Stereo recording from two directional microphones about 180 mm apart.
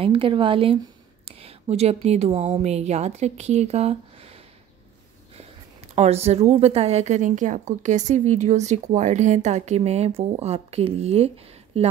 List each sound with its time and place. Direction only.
0.0 s speech: 30° right (ahead or behind)
5.9 s a woman's voice: 35° right (ahead or behind)